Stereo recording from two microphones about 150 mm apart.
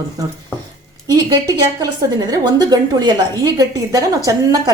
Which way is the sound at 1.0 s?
25° right (ahead or behind).